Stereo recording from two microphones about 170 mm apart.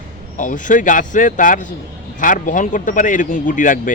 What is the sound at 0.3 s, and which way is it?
A man's voice, 50° left (ahead or behind).